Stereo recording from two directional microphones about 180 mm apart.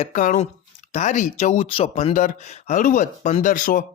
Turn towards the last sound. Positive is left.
turn(degrees=45)  # may be behind; listen again after turning